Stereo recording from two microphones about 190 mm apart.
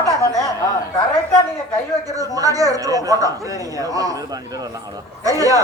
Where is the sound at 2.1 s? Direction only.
20° right (ahead or behind).